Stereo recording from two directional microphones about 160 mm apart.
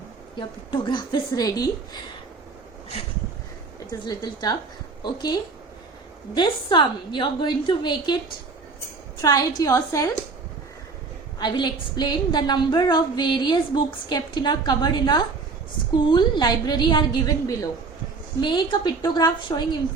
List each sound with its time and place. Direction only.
0.3 s a woman's voice: 30° left (ahead or behind)
4.0 s a woman's voice: 25° left (ahead or behind)
9.2 s a woman's voice: 25° left (ahead or behind)
11.3 s a woman's voice: 25° left (ahead or behind)